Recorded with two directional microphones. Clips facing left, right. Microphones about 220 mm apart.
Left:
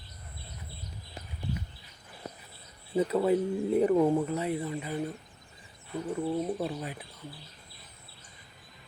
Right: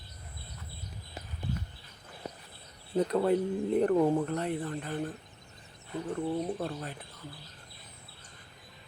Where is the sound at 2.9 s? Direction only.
5° left (ahead or behind).